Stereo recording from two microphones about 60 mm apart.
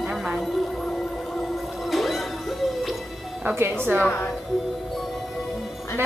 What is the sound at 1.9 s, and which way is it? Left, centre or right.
Music, centre.